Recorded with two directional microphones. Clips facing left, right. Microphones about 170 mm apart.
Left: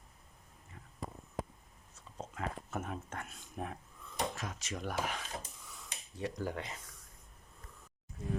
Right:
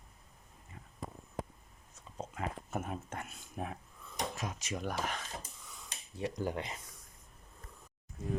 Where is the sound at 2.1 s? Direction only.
15° right (ahead or behind).